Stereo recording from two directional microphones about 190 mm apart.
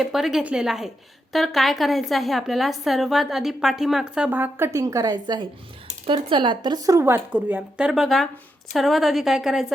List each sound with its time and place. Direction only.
0.0 s a woman's voice: centre (ahead or behind)